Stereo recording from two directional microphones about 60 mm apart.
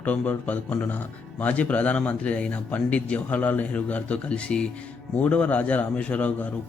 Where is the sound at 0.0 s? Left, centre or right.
Left.